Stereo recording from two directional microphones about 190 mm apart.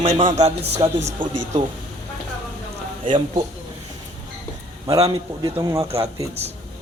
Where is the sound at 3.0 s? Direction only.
25° right (ahead or behind).